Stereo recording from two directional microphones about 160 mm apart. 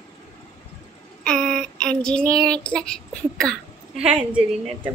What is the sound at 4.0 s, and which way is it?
Female singing, 5° right (ahead or behind).